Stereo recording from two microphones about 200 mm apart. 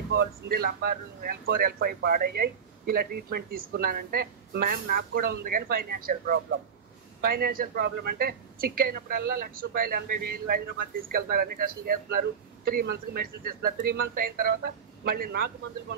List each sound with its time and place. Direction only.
0.1 s speech: 50° right (ahead or behind)